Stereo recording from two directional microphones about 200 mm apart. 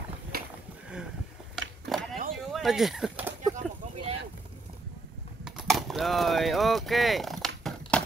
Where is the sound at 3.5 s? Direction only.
30° right (ahead or behind).